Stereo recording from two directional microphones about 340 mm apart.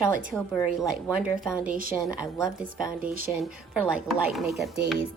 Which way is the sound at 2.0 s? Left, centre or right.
Centre.